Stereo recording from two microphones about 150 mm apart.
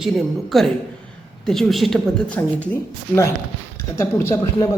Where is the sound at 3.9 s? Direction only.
20° left (ahead or behind).